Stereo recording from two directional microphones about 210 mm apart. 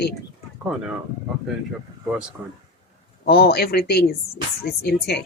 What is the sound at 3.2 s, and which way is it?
Speech, 50° left (ahead or behind).